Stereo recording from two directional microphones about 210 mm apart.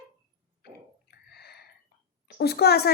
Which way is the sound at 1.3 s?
50° left (ahead or behind).